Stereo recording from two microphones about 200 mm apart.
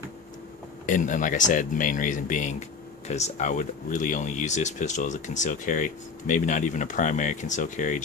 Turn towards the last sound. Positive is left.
turn(degrees=40)  # may be behind; listen again after turning